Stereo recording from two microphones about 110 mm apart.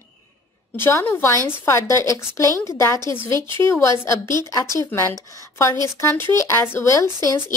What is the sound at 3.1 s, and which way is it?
Speech, 45° right (ahead or behind).